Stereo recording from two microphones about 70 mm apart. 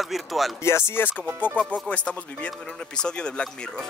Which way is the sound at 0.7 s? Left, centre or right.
Left.